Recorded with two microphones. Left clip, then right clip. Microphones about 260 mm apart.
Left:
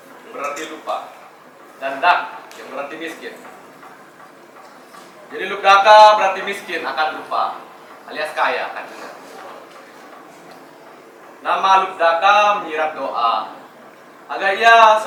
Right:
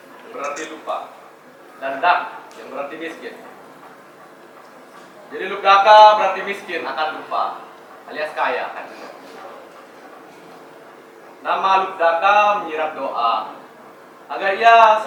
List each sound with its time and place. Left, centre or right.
0.3 s a sound: centre
1.8 s a man's voice: centre
5.3 s a man's voice: centre
7.0 s speech: centre
8.1 s a man's voice: centre
11.4 s a man's voice: centre